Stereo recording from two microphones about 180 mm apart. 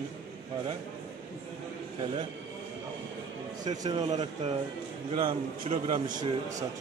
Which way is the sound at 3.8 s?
25° right (ahead or behind).